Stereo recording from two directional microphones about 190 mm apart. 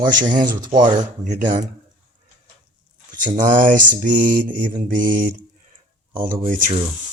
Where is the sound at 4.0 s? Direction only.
45° right (ahead or behind).